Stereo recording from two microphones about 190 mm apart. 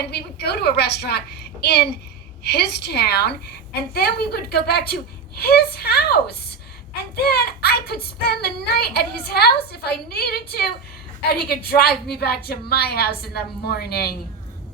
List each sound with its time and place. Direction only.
0.1 s child singing: 60° left (ahead or behind)